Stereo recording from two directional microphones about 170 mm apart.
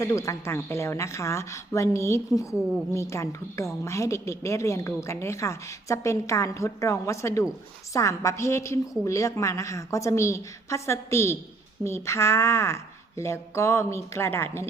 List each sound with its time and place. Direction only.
0.0 s a woman's voice: 15° left (ahead or behind)